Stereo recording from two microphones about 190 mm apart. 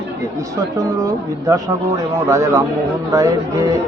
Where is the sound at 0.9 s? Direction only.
15° right (ahead or behind).